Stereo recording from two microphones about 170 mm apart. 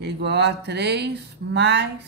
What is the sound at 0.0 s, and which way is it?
Speech, 85° right.